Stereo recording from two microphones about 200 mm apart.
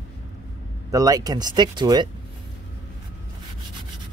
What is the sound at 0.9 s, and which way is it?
Speech, 20° right (ahead or behind).